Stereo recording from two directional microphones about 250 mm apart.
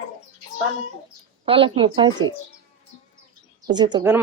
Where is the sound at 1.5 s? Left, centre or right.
Right.